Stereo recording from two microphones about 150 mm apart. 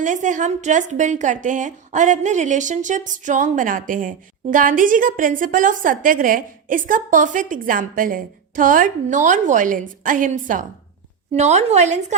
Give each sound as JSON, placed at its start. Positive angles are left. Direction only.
{"t": 0.0, "sound": "a woman's voice", "side_deg": -55}
{"t": 11.3, "sound": "a woman's voice", "side_deg": -45}